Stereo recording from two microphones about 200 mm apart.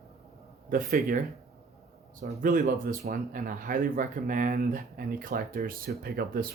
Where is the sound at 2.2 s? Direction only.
35° right (ahead or behind).